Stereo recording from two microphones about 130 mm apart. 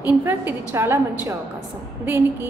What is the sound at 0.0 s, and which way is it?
A woman's voice, 15° right (ahead or behind).